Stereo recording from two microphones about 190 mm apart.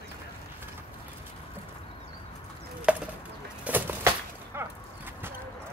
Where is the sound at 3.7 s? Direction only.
10° right (ahead or behind).